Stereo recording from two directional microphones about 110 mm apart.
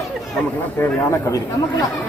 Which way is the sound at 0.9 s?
25° left (ahead or behind).